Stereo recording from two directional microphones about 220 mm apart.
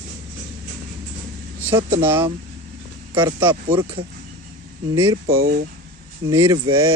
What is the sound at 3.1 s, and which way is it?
Speech, 20° right (ahead or behind).